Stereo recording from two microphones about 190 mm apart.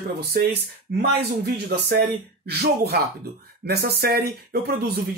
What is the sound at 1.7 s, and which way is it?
Speech, 60° right (ahead or behind).